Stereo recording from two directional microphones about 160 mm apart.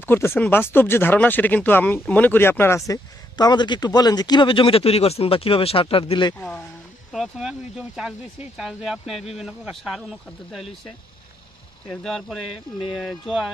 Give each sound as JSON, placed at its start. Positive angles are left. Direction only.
{"t": 0.0, "sound": "speech", "side_deg": 15}
{"t": 7.1, "sound": "speech", "side_deg": 0}
{"t": 11.9, "sound": "speech", "side_deg": 5}